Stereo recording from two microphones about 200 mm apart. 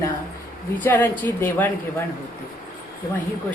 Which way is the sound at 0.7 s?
10° left (ahead or behind).